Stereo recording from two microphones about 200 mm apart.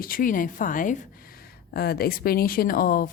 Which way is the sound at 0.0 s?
45° left (ahead or behind).